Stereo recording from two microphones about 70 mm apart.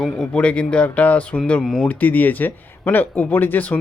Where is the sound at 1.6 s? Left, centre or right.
Centre.